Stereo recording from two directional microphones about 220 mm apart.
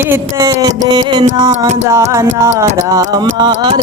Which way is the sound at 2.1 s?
10° right (ahead or behind).